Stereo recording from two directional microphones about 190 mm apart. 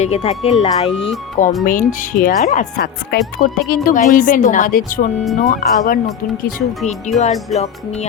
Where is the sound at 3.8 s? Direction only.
45° left (ahead or behind).